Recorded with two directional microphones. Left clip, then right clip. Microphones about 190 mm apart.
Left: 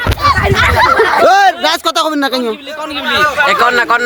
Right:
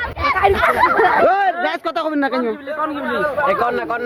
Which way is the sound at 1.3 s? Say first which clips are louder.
Left 8 dB; 40° left (ahead or behind).